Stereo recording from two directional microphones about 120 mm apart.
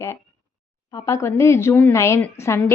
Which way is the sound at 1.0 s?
25° left (ahead or behind).